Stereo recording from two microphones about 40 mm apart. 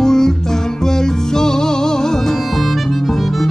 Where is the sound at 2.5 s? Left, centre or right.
Centre.